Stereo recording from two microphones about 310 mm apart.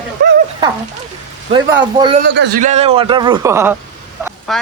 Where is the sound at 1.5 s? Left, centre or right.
Centre.